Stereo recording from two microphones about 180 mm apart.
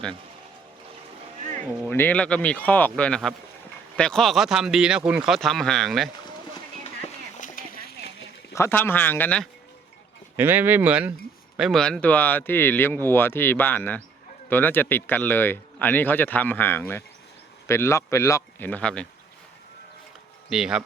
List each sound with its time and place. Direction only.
1.4 s music: 40° right (ahead or behind)
1.9 s speech: 10° left (ahead or behind)
7.3 s a sound: 50° left (ahead or behind)
8.5 s speech: 15° left (ahead or behind)
10.3 s speech: 10° right (ahead or behind); by 19.0 s 5° left (ahead or behind)
20.5 s speech: 5° right (ahead or behind)